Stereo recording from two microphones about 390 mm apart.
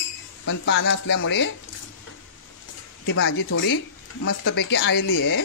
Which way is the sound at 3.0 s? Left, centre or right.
Left.